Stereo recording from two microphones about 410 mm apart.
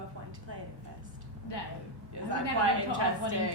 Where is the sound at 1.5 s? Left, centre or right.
Left.